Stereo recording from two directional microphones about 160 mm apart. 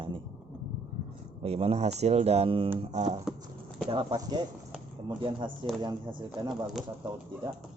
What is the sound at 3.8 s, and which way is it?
Speech, 30° right (ahead or behind).